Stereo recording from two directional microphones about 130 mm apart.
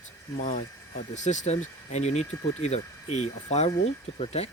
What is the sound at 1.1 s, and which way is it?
Speech, 65° left (ahead or behind).